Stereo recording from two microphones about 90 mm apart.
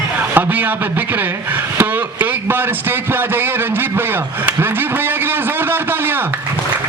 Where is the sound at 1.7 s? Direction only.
25° right (ahead or behind).